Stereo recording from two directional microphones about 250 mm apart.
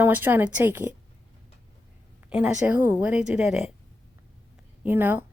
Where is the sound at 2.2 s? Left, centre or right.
Centre.